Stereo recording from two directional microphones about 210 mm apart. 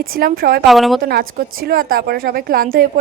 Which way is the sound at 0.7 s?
Centre (ahead or behind).